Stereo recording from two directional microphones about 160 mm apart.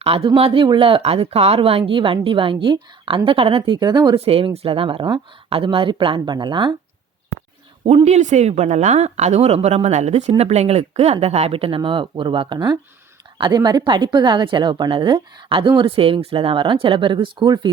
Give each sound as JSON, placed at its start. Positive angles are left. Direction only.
{"t": 0.0, "sound": "speech", "side_deg": -35}
{"t": 7.9, "sound": "a woman's voice", "side_deg": -40}